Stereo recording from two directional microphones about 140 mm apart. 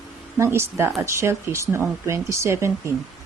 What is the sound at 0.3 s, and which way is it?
Speech, 20° right (ahead or behind).